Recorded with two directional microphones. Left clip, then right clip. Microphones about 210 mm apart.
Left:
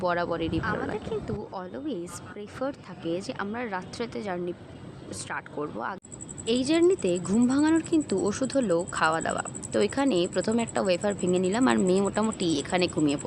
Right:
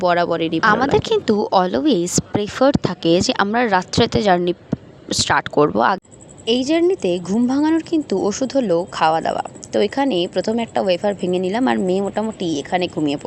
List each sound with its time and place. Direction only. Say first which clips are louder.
0.0 s speech: right 10 dB; 35° right (ahead or behind)
6.4 s a woman's voice: right 7 dB; 20° right (ahead or behind)